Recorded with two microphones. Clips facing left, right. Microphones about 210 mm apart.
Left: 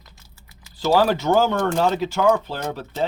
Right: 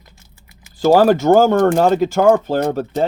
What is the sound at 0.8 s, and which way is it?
Speech, 50° right (ahead or behind).